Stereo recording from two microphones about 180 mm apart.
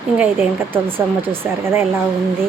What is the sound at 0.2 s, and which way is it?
A woman's voice, 10° right (ahead or behind).